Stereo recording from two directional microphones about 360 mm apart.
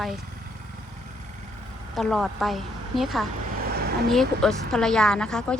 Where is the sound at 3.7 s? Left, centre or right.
Right.